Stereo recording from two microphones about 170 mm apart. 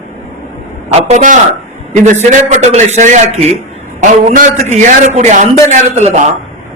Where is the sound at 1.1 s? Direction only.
45° right (ahead or behind).